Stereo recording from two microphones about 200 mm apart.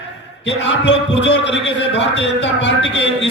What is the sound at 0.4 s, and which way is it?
A man's voice, 60° left (ahead or behind).